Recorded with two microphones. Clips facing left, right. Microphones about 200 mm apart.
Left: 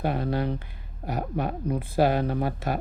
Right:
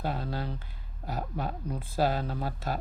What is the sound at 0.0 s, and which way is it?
Speech, 60° left (ahead or behind).